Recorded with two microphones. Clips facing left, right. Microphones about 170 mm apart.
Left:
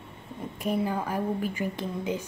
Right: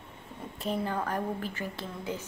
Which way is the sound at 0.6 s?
10° left (ahead or behind).